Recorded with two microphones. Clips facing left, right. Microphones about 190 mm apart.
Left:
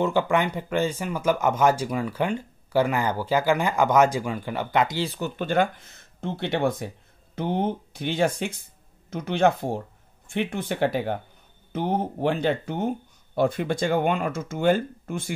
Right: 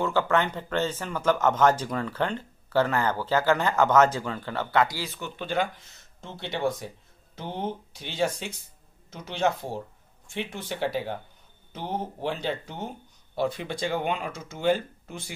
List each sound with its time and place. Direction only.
0.0 s speech: 15° left (ahead or behind); by 5.3 s 35° left (ahead or behind)
5.3 s speech: 50° left (ahead or behind)